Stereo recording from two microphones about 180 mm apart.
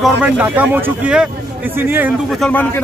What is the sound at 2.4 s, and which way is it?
Speech, 10° left (ahead or behind).